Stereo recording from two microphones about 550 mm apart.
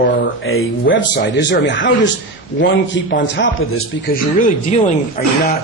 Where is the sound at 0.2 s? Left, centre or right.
Left.